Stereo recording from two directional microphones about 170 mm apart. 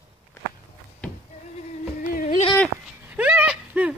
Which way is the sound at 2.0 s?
55° left (ahead or behind).